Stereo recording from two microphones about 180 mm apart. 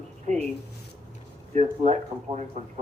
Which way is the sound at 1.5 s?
40° right (ahead or behind).